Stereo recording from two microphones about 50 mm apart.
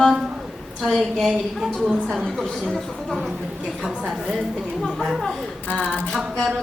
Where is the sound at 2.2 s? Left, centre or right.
Centre.